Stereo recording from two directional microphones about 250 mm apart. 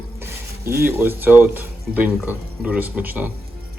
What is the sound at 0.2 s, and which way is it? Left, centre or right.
A man's voice, centre.